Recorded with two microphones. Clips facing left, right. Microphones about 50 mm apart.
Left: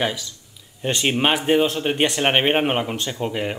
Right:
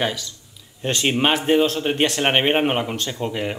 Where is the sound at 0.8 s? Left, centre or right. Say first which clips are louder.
Even; centre.